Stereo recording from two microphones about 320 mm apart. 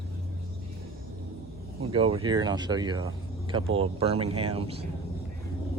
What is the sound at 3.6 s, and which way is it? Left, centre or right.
Speech, right.